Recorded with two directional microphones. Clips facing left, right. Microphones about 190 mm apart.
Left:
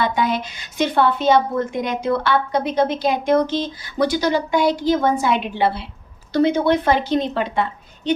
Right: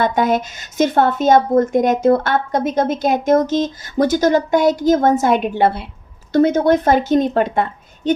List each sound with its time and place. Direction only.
0.0 s a woman's voice: 45° right (ahead or behind)